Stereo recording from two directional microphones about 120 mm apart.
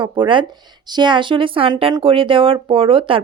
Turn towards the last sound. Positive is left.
turn(degrees=-45)  # may be behind; listen again after turning